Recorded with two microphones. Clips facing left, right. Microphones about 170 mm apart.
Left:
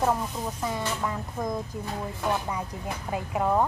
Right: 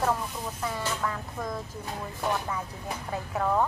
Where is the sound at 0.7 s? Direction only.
15° left (ahead or behind).